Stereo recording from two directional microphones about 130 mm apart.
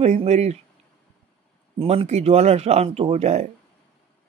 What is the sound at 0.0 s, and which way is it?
Speech, 60° right (ahead or behind).